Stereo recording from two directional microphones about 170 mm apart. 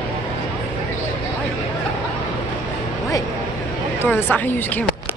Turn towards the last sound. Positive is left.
turn(degrees=10)  # may be behind; listen again after turning